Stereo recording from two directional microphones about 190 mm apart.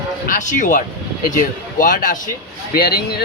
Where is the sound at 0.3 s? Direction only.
40° left (ahead or behind).